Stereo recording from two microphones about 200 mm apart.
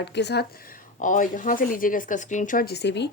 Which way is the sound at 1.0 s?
40° left (ahead or behind).